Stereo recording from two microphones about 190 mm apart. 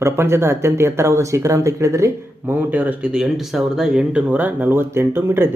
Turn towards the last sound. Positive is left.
turn(degrees=-10)  # may be behind; listen again after turning